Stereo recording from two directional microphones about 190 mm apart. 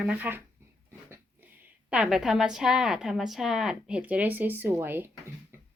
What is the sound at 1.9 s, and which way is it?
A woman's voice, 5° right (ahead or behind).